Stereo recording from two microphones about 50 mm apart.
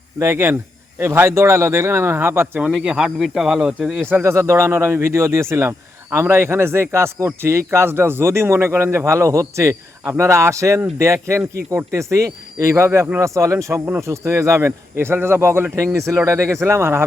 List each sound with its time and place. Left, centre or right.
0.2 s speech: right
2.6 s speech: centre
4.2 s speech: right
6.1 s speech: right
10.0 s speech: right
11.0 s speech: right
11.9 s speech: right
12.7 s speech: right
13.1 s speech: right
14.9 s speech: right
16.0 s speech: right